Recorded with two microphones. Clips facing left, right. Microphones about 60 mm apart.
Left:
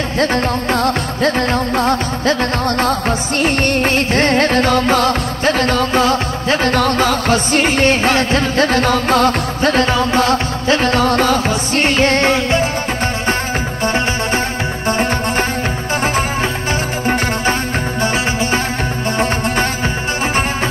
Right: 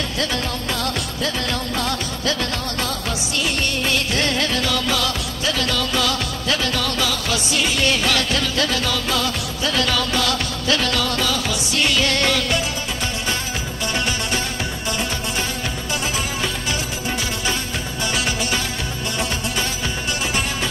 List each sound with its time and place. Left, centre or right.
0.2 s music of bollywood: left
14.9 s music: left